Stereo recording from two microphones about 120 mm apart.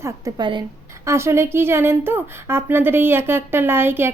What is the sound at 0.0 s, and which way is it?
Speech, 35° right (ahead or behind).